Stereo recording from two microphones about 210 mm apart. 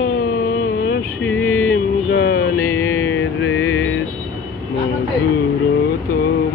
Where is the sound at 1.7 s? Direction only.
50° left (ahead or behind).